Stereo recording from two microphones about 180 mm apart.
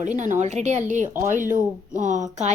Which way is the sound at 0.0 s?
45° right (ahead or behind).